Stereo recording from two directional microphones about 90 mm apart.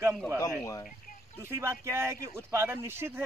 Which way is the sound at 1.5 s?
30° right (ahead or behind).